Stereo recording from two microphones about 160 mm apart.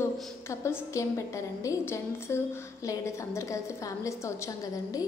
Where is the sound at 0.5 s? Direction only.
20° left (ahead or behind).